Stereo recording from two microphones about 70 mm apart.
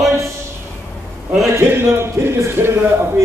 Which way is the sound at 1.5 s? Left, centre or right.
Right.